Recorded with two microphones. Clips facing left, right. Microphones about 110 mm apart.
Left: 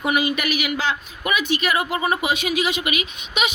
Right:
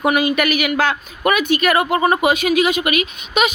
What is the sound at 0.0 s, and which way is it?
Speech, 55° right (ahead or behind).